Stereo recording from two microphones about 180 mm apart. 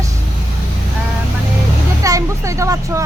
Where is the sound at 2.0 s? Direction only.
20° right (ahead or behind).